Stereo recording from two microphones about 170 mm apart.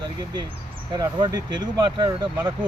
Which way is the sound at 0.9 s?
25° right (ahead or behind).